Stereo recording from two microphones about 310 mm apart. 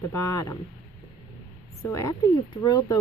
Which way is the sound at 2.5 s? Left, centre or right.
Centre.